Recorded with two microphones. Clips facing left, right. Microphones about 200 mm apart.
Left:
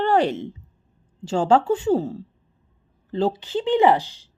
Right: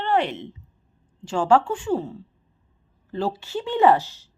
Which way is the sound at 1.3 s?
25° left (ahead or behind).